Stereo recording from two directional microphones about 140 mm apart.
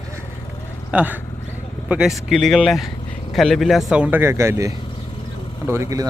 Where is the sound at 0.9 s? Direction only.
10° right (ahead or behind).